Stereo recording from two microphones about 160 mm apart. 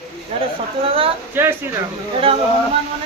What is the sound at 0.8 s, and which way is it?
Speech, 35° right (ahead or behind).